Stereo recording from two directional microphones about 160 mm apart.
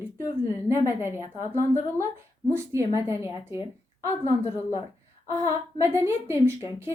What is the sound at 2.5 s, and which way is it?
A woman's voice, 15° right (ahead or behind).